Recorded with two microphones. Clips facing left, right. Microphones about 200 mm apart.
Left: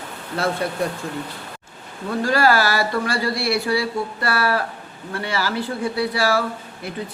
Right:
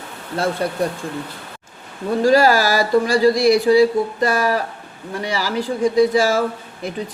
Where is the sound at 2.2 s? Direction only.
15° right (ahead or behind).